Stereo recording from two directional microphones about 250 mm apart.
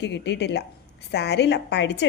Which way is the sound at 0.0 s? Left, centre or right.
Left.